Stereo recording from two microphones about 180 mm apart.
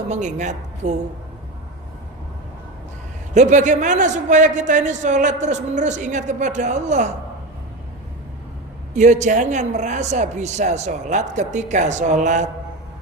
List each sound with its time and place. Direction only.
0.1 s a man's voice: 40° right (ahead or behind)
3.3 s a man's voice: 40° right (ahead or behind)
9.0 s a man's voice: 40° right (ahead or behind)